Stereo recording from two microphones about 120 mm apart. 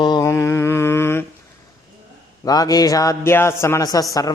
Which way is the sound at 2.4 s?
30° left (ahead or behind).